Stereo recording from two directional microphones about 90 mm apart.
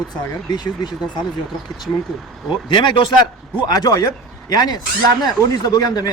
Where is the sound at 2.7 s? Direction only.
60° left (ahead or behind).